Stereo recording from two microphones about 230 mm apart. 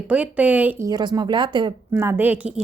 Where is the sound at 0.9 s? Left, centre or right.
Centre.